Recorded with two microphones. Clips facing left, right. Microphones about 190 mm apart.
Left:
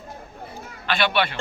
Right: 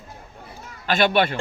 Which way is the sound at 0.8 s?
45° right (ahead or behind).